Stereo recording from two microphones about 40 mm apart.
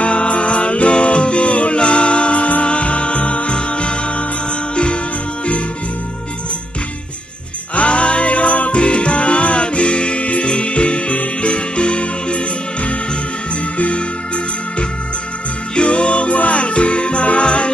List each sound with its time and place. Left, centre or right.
0.0 s music: left
7.7 s music: left
13.7 s music: left